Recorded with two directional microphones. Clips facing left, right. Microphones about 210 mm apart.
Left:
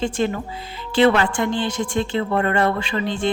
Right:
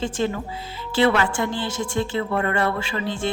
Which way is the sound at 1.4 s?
20° left (ahead or behind).